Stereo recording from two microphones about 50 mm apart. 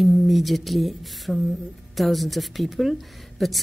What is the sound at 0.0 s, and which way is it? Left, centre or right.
A woman's voice, centre.